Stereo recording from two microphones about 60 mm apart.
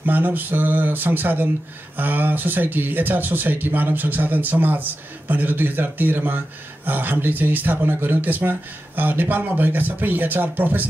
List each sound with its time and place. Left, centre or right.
0.0 s speech: right